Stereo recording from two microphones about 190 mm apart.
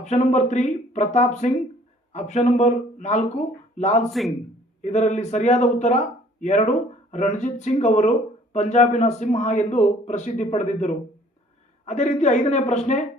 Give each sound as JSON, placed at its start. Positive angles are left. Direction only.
{"t": 0.0, "sound": "a man's voice", "side_deg": 35}